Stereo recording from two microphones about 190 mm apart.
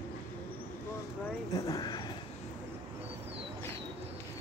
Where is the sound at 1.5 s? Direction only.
20° left (ahead or behind).